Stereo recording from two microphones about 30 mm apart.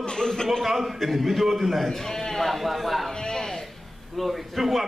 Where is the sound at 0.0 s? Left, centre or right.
Left.